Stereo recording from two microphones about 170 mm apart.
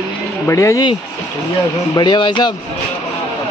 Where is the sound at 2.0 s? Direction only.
25° left (ahead or behind).